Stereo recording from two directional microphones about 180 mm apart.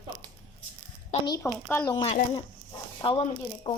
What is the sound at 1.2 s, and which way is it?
A woman's voice, 20° left (ahead or behind).